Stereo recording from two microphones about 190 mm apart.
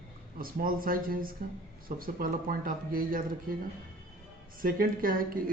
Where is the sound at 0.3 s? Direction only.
50° right (ahead or behind).